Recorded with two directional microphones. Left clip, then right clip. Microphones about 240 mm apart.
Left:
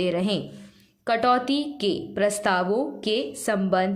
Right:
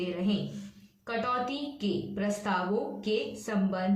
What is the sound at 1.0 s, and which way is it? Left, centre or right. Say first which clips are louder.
A woman's voice: left 10 dB; left.